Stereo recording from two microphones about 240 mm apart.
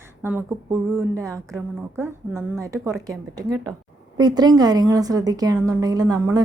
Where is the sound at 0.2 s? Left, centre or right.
Centre.